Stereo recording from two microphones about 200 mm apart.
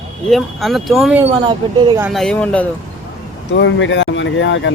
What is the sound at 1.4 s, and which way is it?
Speech, 20° right (ahead or behind).